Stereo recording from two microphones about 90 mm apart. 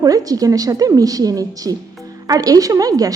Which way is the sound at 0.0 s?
45° right (ahead or behind).